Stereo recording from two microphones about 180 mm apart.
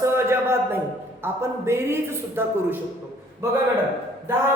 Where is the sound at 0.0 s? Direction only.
15° right (ahead or behind).